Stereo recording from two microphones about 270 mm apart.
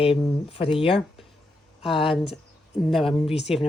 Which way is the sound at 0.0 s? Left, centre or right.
Centre.